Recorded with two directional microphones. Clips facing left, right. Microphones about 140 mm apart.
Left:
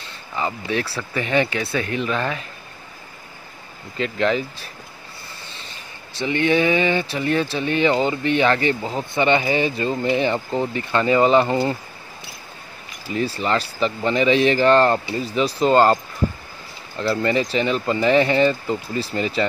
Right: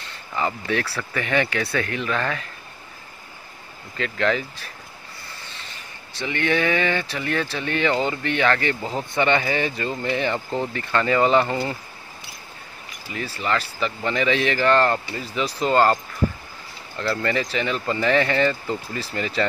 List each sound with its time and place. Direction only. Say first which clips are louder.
0.4 s speech: even; 20° left (ahead or behind)
4.0 s speech: left 2 dB; 20° left (ahead or behind)
6.1 s speech: left 4 dB; 20° left (ahead or behind)
13.1 s speech: left 4 dB; 25° left (ahead or behind)
17.0 s speech: left 4 dB; 20° left (ahead or behind)